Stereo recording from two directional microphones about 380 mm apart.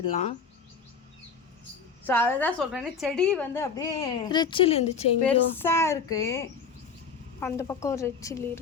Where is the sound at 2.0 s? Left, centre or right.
Centre.